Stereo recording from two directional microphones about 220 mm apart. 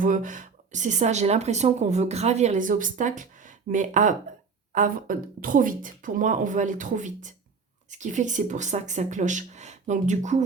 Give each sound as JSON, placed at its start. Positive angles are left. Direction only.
{"t": 0.0, "sound": "speech", "side_deg": -35}